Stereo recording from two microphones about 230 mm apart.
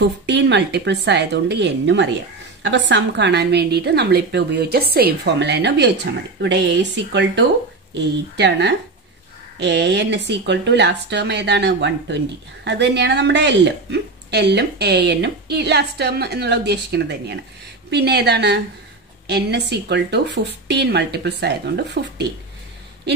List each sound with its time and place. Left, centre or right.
0.0 s a woman's voice: right